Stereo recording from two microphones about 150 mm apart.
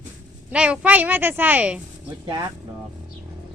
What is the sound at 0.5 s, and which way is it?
A child's voice, 10° right (ahead or behind).